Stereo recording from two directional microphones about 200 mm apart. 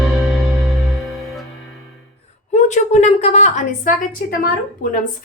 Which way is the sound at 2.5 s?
35° left (ahead or behind).